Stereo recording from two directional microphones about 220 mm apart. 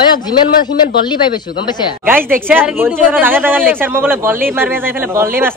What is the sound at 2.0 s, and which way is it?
Speech, 10° right (ahead or behind).